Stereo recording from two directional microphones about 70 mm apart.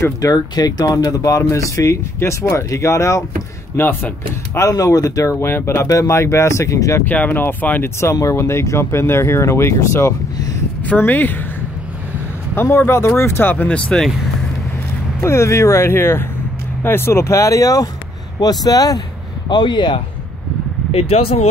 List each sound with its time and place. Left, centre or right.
0.2 s speech: left
0.9 s speech: left
3.7 s speech: left
4.6 s speech: left
7.1 s speech: left
8.0 s speech: left
11.0 s speech: left
12.5 s speech: left
13.7 s speech: centre
15.2 s speech: left
18.4 s speech: left
19.5 s speech: left